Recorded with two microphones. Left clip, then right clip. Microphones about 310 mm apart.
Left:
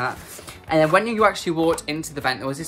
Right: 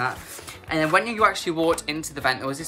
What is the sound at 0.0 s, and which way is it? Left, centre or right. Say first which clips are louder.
Speech: even; centre.